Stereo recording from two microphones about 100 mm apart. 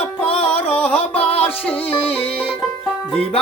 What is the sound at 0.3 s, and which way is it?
Music, 70° left (ahead or behind).